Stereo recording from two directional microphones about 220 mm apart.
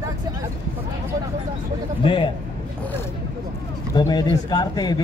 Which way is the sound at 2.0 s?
20° left (ahead or behind).